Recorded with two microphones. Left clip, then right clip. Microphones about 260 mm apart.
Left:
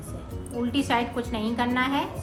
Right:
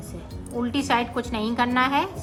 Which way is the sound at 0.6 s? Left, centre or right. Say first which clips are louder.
Right 2 dB; centre.